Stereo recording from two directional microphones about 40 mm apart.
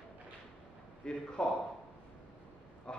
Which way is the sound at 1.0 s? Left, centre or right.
Left.